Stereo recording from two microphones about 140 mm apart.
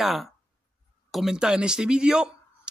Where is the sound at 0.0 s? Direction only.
Centre (ahead or behind).